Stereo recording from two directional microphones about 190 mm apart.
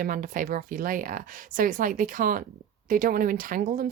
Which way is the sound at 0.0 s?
45° right (ahead or behind).